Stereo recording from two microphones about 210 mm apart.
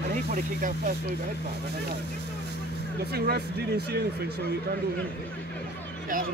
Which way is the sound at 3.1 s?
50° right (ahead or behind).